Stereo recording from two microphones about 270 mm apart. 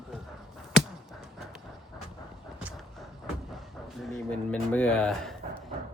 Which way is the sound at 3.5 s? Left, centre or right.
Centre.